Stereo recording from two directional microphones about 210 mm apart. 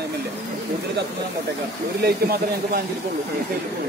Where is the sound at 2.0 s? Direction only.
45° right (ahead or behind).